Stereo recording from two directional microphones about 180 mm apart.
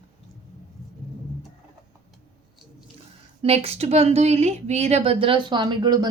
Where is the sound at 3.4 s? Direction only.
35° right (ahead or behind).